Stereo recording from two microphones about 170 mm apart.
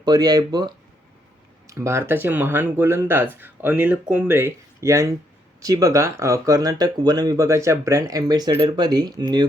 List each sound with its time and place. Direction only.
0.0 s speech: 25° right (ahead or behind)